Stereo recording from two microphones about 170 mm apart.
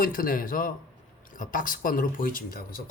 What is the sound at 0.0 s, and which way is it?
Speech, 55° left (ahead or behind).